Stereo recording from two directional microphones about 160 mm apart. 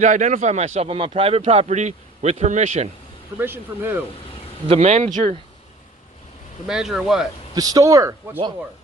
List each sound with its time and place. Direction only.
0.0 s speech: 50° right (ahead or behind)
3.3 s speech: 15° right (ahead or behind)
4.7 s speech: 45° right (ahead or behind)
6.7 s speech: 5° right (ahead or behind)
7.5 s speech: 25° right (ahead or behind)